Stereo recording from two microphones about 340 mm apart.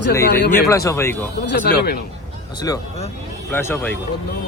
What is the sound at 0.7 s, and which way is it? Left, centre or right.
Speech, centre.